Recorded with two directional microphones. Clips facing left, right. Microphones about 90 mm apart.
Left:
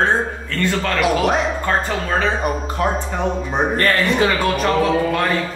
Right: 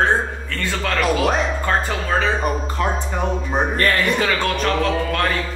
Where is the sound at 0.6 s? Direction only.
Centre (ahead or behind).